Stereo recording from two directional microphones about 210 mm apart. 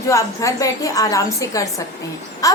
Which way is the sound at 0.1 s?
15° left (ahead or behind).